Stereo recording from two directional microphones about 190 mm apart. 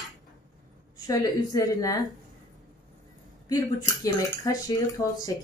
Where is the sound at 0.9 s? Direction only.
20° left (ahead or behind).